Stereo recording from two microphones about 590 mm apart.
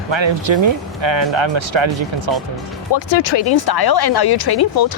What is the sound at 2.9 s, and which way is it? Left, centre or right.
Speech, left.